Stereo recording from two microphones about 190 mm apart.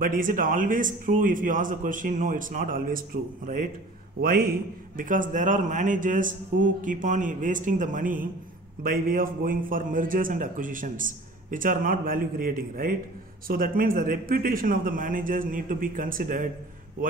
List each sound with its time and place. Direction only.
0.0 s a man's voice: 45° right (ahead or behind)